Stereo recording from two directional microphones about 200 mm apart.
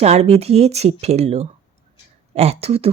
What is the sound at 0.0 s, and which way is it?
Speech, 35° right (ahead or behind).